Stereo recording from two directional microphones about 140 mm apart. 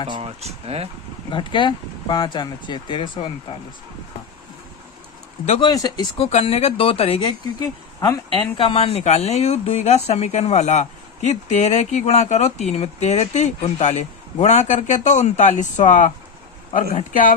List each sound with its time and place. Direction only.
0.1 s speech: 45° right (ahead or behind)
1.3 s speech: 35° left (ahead or behind)
5.5 s speech: 30° left (ahead or behind)
6.1 s speech: 45° left (ahead or behind)
7.6 s speech: 25° left (ahead or behind)
8.5 s speech: 40° left (ahead or behind); by 17.3 s 70° left (ahead or behind)